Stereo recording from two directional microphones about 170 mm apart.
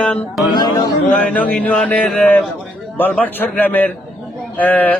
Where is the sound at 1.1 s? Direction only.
10° left (ahead or behind).